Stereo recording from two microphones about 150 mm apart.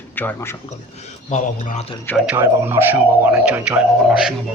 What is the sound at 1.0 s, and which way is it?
Speech, 50° left (ahead or behind).